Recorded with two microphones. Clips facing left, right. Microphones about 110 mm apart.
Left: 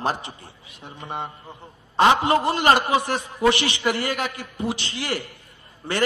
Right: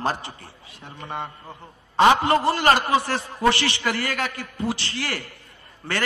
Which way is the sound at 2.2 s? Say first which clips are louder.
Even; 20° left (ahead or behind).